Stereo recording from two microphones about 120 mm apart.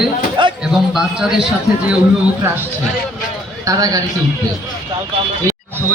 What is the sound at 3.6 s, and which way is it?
Speech, 30° right (ahead or behind).